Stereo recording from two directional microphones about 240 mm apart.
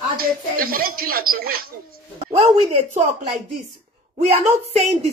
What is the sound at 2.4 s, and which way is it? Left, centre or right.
Speech, right.